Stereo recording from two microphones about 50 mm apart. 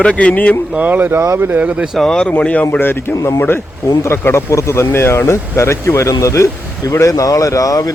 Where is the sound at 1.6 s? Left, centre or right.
Right.